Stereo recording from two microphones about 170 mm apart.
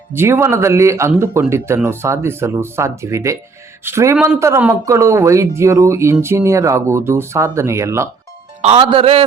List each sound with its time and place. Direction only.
0.1 s speech: 15° right (ahead or behind)
8.6 s a man's voice: 30° right (ahead or behind)